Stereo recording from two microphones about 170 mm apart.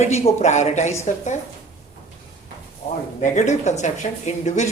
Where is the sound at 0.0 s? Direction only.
40° left (ahead or behind).